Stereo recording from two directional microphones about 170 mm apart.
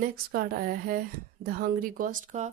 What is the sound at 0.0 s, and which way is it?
A woman's voice, 60° right (ahead or behind).